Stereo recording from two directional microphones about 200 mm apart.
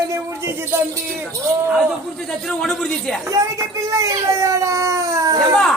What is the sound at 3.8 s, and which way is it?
Speech, 15° right (ahead or behind).